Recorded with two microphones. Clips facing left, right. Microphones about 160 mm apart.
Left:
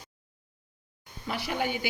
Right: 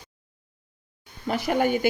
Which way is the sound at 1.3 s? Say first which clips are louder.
Right 8 dB; 45° right (ahead or behind).